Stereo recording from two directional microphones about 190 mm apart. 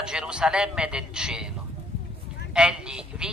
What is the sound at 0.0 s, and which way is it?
A woman's voice, 5° right (ahead or behind).